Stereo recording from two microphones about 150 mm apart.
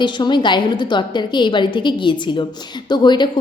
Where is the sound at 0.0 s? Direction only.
30° left (ahead or behind).